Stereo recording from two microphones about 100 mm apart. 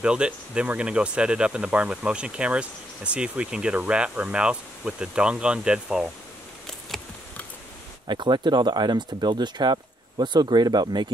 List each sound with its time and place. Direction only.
0.0 s speech: 10° right (ahead or behind)
6.9 s a sound: 5° left (ahead or behind)
8.1 s speech: 50° right (ahead or behind)